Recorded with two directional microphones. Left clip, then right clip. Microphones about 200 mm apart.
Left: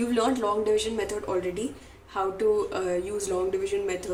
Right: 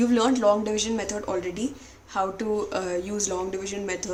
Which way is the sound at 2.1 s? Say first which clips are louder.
Left 2 dB; 25° right (ahead or behind).